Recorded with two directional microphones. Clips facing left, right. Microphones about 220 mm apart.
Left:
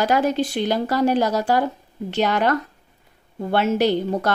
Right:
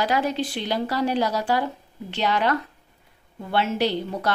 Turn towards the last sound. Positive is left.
turn(degrees=45)  # may be behind; listen again after turning